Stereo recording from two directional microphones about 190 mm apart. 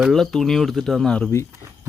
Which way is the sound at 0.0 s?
Centre (ahead or behind).